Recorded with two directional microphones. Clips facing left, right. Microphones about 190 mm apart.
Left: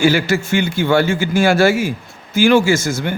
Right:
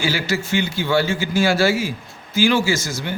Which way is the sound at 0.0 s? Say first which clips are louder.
Left 7 dB; 50° left (ahead or behind).